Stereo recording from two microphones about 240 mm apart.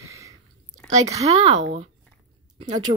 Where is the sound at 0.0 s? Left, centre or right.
Centre.